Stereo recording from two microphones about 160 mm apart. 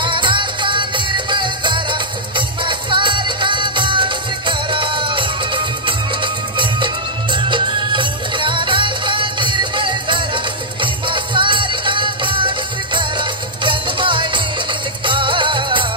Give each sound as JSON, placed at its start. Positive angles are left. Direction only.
{"t": 0.0, "sound": "music", "side_deg": -30}